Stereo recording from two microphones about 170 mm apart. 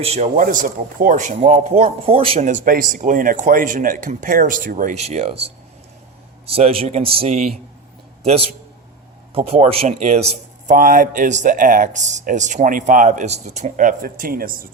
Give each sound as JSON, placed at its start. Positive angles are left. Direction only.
{"t": 0.0, "sound": "a man's voice", "side_deg": -35}
{"t": 0.3, "sound": "speech", "side_deg": -55}
{"t": 6.4, "sound": "a man's voice", "side_deg": -35}
{"t": 10.7, "sound": "speech", "side_deg": -55}